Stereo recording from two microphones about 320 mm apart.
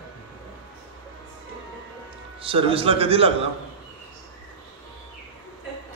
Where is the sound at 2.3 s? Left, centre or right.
Centre.